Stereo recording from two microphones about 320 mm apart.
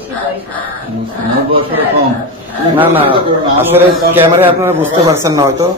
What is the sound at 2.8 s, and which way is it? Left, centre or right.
A man's voice, centre.